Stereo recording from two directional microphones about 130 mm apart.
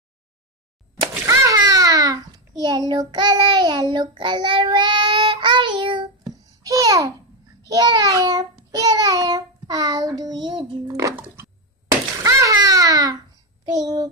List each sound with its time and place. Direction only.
1.2 s a sound: 25° right (ahead or behind)
2.9 s child singing: 35° right (ahead or behind)
6.3 s babbling: 30° right (ahead or behind)
8.7 s child singing: 30° right (ahead or behind)
10.9 s a sound: 25° right (ahead or behind)
12.2 s babbling: 25° right (ahead or behind)
13.7 s child singing: 30° right (ahead or behind)